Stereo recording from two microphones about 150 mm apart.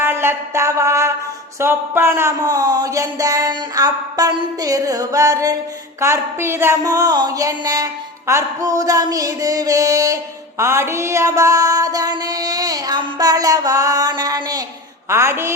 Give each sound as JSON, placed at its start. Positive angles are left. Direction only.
{"t": 0.0, "sound": "a woman's voice", "side_deg": -15}